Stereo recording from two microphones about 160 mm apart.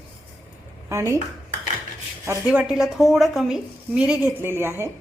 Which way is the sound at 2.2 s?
10° right (ahead or behind).